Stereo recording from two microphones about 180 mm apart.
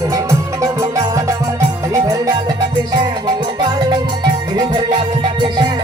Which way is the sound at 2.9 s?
25° right (ahead or behind).